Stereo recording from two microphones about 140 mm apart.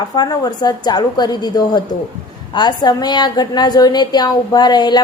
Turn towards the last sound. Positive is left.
turn(degrees=30)  # may be behind; listen again after turning